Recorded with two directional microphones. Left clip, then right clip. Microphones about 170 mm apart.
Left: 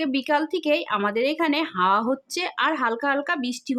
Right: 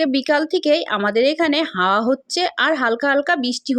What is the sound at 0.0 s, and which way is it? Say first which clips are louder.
Speech: right 5 dB; 30° right (ahead or behind).